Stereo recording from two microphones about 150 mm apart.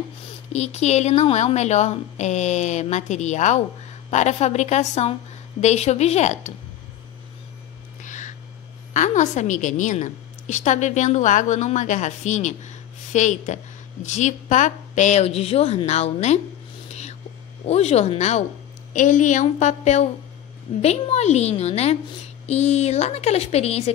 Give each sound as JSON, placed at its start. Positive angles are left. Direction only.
{"t": 0.5, "sound": "a woman's voice", "side_deg": 50}
{"t": 8.0, "sound": "a sound", "side_deg": 55}
{"t": 8.9, "sound": "a woman's voice", "side_deg": 55}
{"t": 17.6, "sound": "a woman's voice", "side_deg": 45}